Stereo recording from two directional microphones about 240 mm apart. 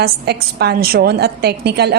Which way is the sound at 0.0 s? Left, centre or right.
Right.